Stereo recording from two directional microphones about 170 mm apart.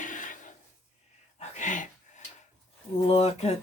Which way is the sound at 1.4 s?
45° left (ahead or behind).